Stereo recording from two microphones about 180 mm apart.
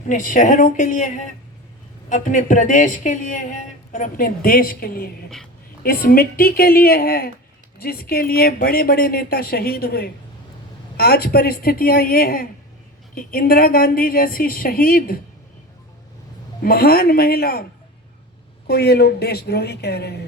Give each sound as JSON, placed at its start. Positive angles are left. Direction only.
{"t": 0.1, "sound": "a woman's voice", "side_deg": 45}
{"t": 16.6, "sound": "a woman's voice", "side_deg": 60}
{"t": 18.7, "sound": "a woman's voice", "side_deg": 60}